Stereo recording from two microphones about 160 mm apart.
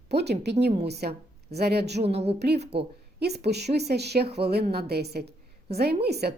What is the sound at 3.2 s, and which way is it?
A woman's voice, 90° right.